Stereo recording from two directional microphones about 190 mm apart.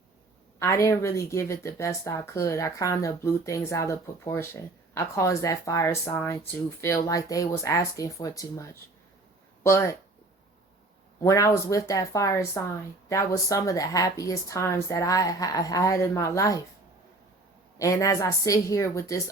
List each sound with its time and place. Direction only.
0.6 s speech: 15° left (ahead or behind)
11.2 s speech: 15° left (ahead or behind)
17.7 s speech: 15° left (ahead or behind)